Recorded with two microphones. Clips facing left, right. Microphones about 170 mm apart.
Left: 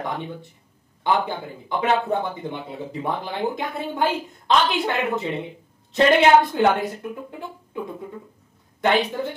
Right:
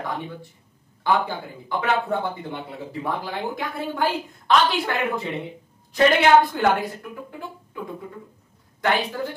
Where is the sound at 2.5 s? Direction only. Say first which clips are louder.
Left 1 dB; 20° left (ahead or behind).